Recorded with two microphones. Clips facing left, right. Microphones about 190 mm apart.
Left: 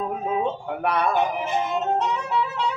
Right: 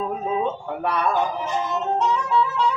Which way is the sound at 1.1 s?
20° left (ahead or behind).